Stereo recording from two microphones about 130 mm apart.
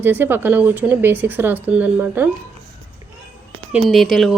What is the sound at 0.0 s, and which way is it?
A man's voice, 15° right (ahead or behind).